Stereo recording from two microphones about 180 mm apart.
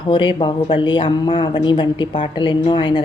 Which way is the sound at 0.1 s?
25° left (ahead or behind).